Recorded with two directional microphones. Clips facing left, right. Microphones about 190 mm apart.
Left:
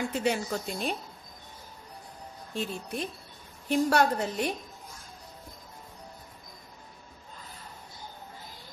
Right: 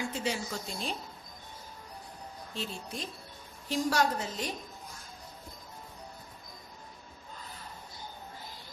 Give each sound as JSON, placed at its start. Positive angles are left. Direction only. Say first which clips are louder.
{"t": 0.1, "sound": "a woman's voice", "louder": "left 6 dB", "side_deg": 60}
{"t": 2.5, "sound": "a woman's voice", "louder": "left 6 dB", "side_deg": 60}